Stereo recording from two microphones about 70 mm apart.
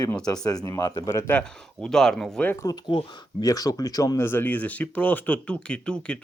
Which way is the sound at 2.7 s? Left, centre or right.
Left.